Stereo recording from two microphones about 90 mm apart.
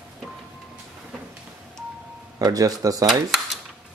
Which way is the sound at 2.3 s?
40° right (ahead or behind).